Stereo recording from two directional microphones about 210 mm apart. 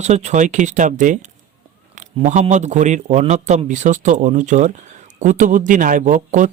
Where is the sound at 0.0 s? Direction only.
35° right (ahead or behind).